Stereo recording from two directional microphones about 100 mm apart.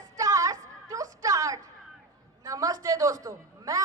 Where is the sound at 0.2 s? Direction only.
35° right (ahead or behind).